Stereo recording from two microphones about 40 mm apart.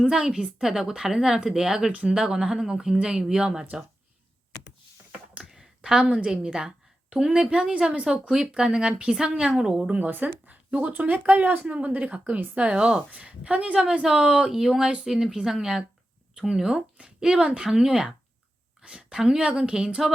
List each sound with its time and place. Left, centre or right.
0.0 s speech: centre
3.0 s a woman's voice: centre
5.4 s a sound: centre
6.1 s a woman's voice: right
6.3 s a woman's voice: centre
9.9 s a woman's voice: right; by 19.5 s centre
19.5 s a woman's voice: right
20.0 s music: centre